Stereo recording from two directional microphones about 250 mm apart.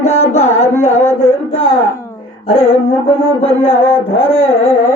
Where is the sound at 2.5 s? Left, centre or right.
Left.